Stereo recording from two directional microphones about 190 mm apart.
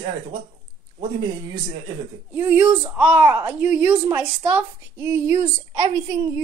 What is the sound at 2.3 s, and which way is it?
A woman's voice, 10° right (ahead or behind).